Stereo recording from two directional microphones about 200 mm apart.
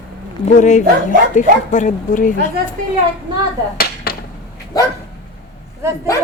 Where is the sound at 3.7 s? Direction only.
50° left (ahead or behind).